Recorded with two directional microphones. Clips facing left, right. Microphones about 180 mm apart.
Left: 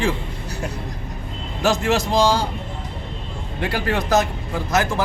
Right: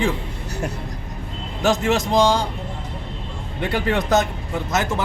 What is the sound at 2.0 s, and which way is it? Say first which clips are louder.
Speech: right 1 dB; 20° right (ahead or behind).